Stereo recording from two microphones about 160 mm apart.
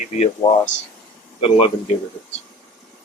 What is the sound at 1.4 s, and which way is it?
Speech, 35° left (ahead or behind).